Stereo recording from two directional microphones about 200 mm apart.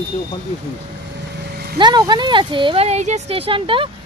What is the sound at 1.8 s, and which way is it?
Speech, 20° right (ahead or behind).